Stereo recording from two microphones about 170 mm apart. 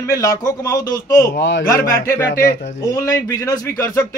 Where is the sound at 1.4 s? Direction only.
90° left.